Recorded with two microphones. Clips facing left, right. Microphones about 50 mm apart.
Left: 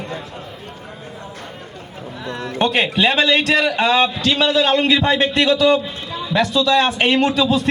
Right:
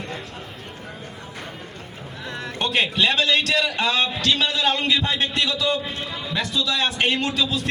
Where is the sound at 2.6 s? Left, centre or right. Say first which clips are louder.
Left 3 dB; left.